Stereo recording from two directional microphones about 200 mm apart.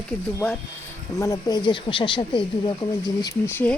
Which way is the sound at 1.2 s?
15° left (ahead or behind).